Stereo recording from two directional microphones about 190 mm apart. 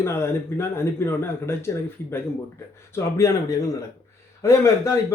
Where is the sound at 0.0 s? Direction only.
15° left (ahead or behind).